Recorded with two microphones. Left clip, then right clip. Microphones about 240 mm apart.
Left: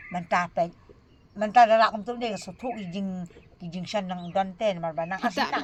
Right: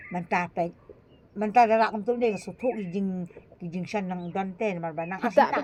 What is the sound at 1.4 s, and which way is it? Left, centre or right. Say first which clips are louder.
Speech: left 2 dB; left.